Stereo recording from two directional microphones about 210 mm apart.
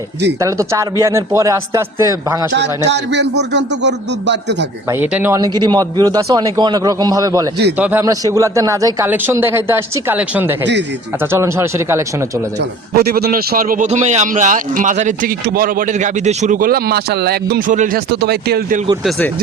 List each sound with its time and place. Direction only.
0.3 s a man's voice: 15° right (ahead or behind)
2.5 s speech: 55° right (ahead or behind)
4.9 s a man's voice: 10° right (ahead or behind)
12.5 s a man's voice: 50° right (ahead or behind)